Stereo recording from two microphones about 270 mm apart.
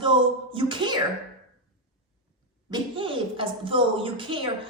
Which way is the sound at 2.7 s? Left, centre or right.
Centre.